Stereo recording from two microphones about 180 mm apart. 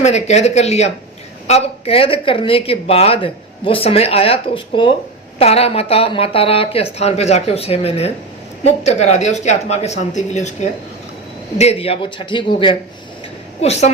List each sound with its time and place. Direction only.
0.0 s a man's voice: 40° left (ahead or behind)